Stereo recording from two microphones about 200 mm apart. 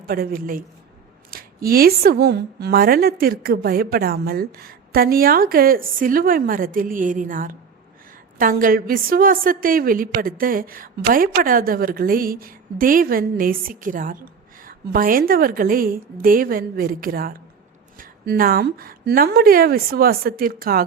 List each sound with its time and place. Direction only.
0.0 s a woman's voice: 45° right (ahead or behind)